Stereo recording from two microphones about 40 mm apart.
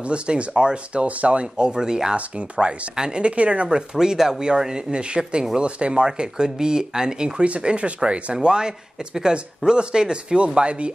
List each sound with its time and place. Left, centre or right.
0.0 s speech: right
1.0 s speech: right; by 2.1 s centre
2.1 s speech: right
3.6 s speech: centre